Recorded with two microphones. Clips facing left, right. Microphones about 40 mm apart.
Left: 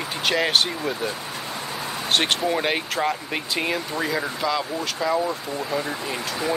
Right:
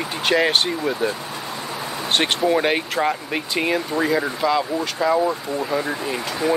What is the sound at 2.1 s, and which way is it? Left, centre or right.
Speech, centre.